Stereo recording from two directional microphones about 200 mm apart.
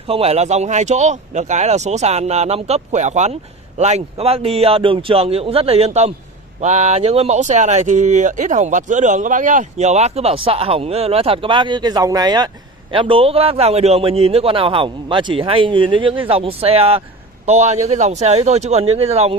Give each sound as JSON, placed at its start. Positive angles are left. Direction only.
{"t": 0.0, "sound": "a man's voice", "side_deg": -30}